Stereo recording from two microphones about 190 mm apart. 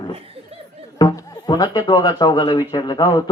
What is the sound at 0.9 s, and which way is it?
A man's voice, 20° left (ahead or behind).